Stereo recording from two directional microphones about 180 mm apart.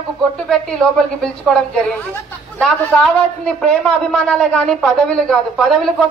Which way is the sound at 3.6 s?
5° left (ahead or behind).